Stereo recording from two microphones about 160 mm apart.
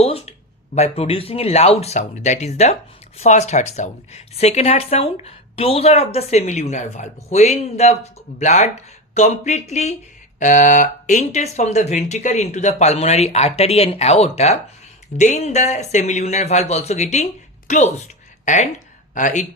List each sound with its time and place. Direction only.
0.0 s speech: 40° left (ahead or behind)